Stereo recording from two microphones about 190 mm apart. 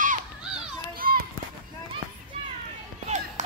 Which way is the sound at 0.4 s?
5° right (ahead or behind).